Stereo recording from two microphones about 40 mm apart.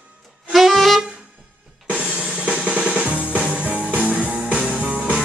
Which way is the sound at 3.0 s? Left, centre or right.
Right.